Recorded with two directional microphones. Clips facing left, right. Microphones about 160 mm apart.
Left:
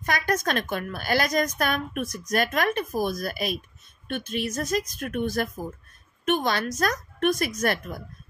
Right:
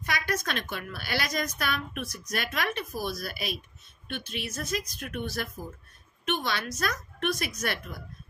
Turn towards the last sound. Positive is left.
turn(degrees=50)  # may be behind; listen again after turning